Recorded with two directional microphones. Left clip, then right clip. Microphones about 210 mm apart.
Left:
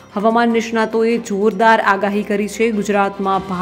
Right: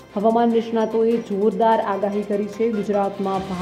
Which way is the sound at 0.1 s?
35° left (ahead or behind).